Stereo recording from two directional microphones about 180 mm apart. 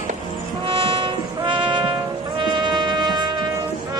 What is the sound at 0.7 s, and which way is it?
Music, 30° right (ahead or behind).